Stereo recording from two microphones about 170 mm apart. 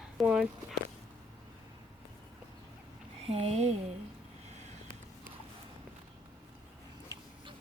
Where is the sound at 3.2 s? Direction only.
35° right (ahead or behind).